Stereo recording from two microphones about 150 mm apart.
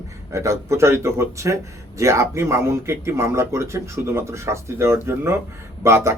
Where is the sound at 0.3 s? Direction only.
20° right (ahead or behind).